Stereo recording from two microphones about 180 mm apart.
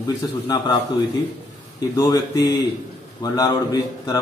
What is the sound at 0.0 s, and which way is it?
A man's voice, 25° left (ahead or behind).